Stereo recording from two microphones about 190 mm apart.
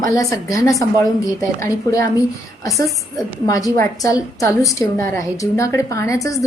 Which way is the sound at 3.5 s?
15° left (ahead or behind).